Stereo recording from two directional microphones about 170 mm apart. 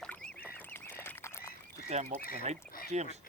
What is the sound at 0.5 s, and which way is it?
Duck, 10° left (ahead or behind).